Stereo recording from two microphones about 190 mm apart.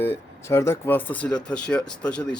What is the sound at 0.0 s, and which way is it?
Speech, 15° left (ahead or behind).